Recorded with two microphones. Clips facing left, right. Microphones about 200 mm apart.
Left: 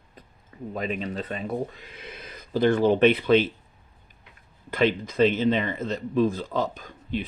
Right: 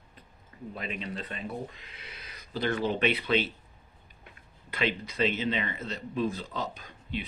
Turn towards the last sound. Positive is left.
turn(degrees=45)  # may be behind; listen again after turning